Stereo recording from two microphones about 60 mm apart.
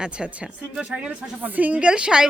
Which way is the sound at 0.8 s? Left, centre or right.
Centre.